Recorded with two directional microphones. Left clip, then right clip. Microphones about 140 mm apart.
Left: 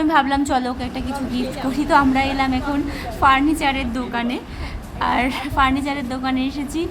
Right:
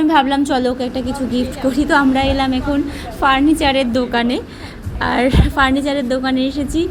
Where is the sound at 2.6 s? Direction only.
Centre (ahead or behind).